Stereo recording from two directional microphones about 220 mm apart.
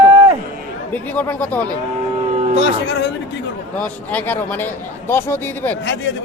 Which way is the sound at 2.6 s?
50° left (ahead or behind).